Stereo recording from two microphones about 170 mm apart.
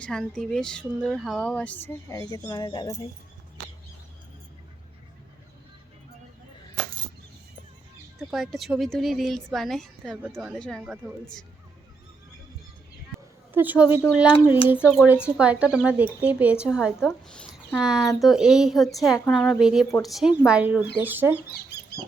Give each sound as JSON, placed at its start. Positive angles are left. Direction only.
{"t": 0.0, "sound": "speech", "side_deg": 5}
{"t": 8.2, "sound": "speech", "side_deg": 0}
{"t": 13.5, "sound": "speech", "side_deg": -10}
{"t": 21.4, "sound": "a sound", "side_deg": 65}